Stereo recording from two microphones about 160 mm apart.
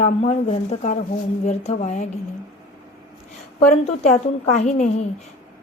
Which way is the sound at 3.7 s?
45° left (ahead or behind).